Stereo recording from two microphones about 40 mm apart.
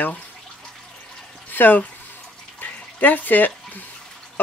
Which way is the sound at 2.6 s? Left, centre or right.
Left.